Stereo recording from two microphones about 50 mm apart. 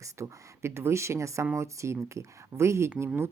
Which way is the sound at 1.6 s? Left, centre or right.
Right.